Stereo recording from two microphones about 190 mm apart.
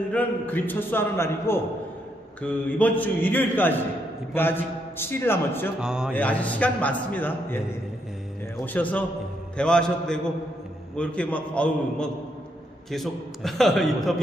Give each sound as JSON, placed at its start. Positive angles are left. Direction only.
{"t": 0.1, "sound": "a man's voice", "side_deg": 10}
{"t": 5.8, "sound": "a man's voice", "side_deg": -5}
{"t": 6.1, "sound": "a man's voice", "side_deg": 10}
{"t": 8.6, "sound": "a man's voice", "side_deg": 10}